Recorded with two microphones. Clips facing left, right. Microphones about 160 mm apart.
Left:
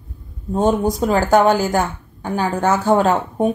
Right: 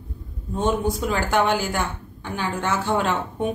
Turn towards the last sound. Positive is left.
turn(degrees=40)  # may be behind; listen again after turning